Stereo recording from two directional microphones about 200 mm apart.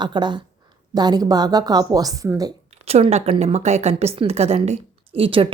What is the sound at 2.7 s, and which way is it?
Speech, 30° right (ahead or behind).